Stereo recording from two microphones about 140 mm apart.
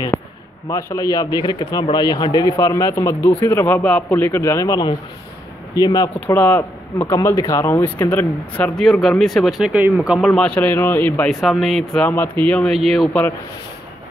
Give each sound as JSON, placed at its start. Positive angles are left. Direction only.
{"t": 0.1, "sound": "a sound", "side_deg": 20}
{"t": 0.7, "sound": "a man's voice", "side_deg": 20}
{"t": 6.1, "sound": "a man's voice", "side_deg": 15}
{"t": 10.3, "sound": "speech", "side_deg": 10}
{"t": 11.2, "sound": "a man's voice", "side_deg": 0}